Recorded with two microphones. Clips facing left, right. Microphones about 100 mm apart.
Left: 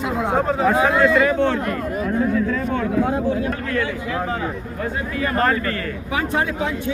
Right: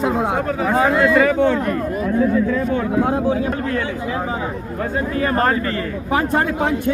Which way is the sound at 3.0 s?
70° right (ahead or behind).